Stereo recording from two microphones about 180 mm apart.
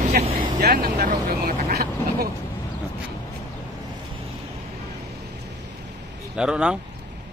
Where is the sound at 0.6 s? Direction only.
60° right (ahead or behind).